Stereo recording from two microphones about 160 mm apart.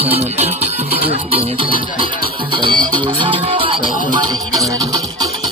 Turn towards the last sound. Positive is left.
turn(degrees=-35)  # may be behind; listen again after turning